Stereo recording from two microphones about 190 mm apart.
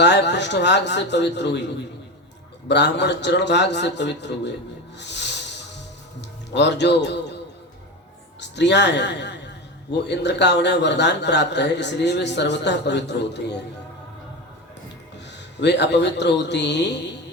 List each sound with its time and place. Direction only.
0.0 s a man's voice: 65° left (ahead or behind)
2.6 s a man's voice: 65° left (ahead or behind)
6.5 s a man's voice: 65° left (ahead or behind)
8.4 s a man's voice: 65° left (ahead or behind)
15.5 s a man's voice: 65° left (ahead or behind)